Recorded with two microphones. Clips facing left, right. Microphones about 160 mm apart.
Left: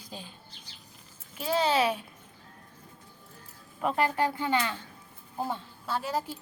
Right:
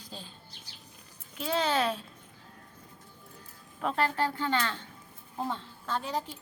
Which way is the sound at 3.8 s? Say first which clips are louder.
Left 2 dB; 10° left (ahead or behind).